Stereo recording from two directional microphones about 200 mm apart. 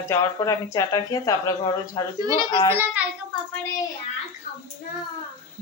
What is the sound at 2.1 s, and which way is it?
Speech, 20° right (ahead or behind).